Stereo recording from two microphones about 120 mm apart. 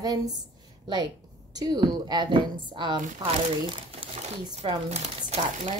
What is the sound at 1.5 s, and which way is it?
A woman's voice, 35° right (ahead or behind).